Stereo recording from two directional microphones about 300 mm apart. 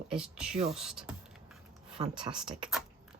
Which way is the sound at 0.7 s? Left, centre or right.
Centre.